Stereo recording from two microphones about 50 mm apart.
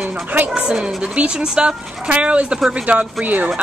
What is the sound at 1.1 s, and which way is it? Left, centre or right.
Speech, right.